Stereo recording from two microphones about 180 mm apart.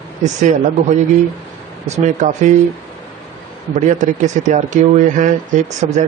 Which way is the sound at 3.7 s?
45° right (ahead or behind).